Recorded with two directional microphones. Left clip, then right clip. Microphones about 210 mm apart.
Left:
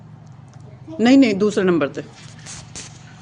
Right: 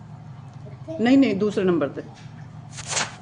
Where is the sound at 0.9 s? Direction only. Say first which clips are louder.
Left 4 dB; 30° left (ahead or behind).